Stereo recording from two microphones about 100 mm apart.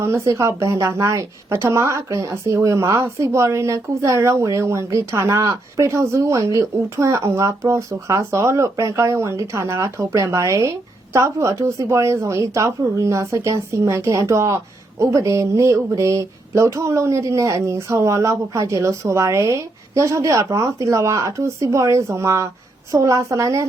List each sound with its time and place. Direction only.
0.0 s a woman's voice: 30° right (ahead or behind)